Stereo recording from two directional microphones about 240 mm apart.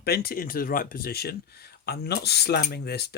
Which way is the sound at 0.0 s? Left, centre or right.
Left.